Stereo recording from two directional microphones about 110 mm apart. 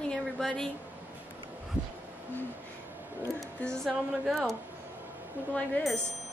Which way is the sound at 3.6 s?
10° left (ahead or behind).